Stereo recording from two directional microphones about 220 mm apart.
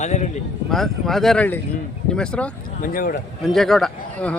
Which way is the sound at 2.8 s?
40° left (ahead or behind).